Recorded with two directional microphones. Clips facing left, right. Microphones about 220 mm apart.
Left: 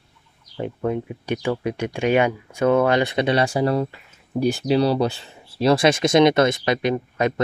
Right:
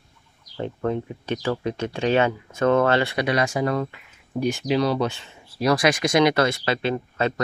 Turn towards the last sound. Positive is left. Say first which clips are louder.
# left 3 dB
turn(degrees=15)  # may be behind; listen again after turning